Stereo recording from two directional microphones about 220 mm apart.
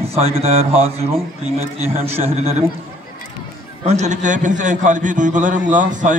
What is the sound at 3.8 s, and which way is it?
A man's voice, 30° right (ahead or behind).